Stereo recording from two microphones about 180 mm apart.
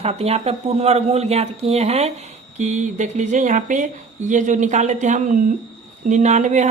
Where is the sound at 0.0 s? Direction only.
35° right (ahead or behind).